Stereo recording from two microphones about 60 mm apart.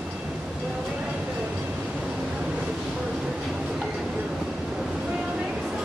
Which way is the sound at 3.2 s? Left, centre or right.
Centre.